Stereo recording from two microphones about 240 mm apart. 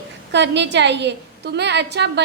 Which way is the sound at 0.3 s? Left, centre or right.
Right.